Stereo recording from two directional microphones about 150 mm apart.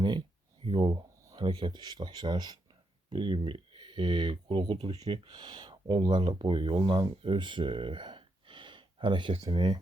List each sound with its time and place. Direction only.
0.0 s speech: 30° right (ahead or behind)